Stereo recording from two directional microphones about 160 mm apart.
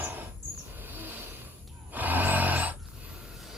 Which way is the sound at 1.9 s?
10° right (ahead or behind).